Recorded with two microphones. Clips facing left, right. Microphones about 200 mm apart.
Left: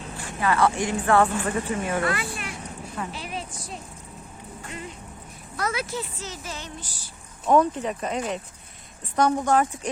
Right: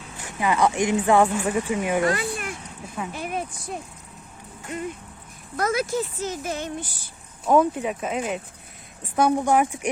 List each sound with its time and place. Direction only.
0.2 s a woman's voice: 15° right (ahead or behind)
2.0 s a sound: 45° right (ahead or behind)
3.1 s speech: 50° right (ahead or behind)
7.4 s a woman's voice: 5° right (ahead or behind)